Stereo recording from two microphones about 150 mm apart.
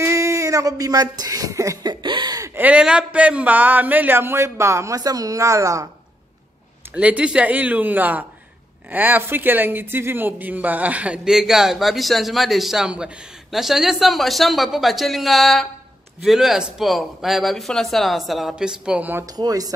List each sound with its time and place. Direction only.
0.0 s speech: 20° right (ahead or behind)
6.9 s a man's voice: 10° right (ahead or behind)
19.2 s speech: 25° right (ahead or behind)